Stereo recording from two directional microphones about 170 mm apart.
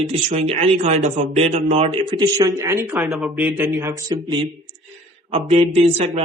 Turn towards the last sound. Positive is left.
turn(degrees=-40)  # may be behind; listen again after turning